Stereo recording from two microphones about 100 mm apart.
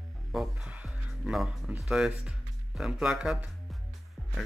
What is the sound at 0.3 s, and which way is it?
Speech, centre (ahead or behind).